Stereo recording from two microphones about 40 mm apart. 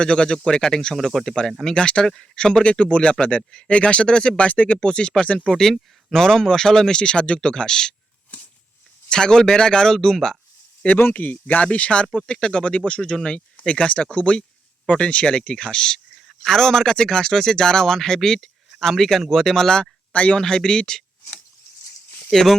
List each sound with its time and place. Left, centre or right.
0.0 s speech: left
0.9 s speech: centre
1.7 s speech: left
4.8 s speech: left
5.5 s speech: centre
7.0 s speech: left
9.0 s speech: centre
10.9 s speech: left
11.7 s speech: left
20.1 s speech: left
20.4 s speech: centre
22.3 s speech: centre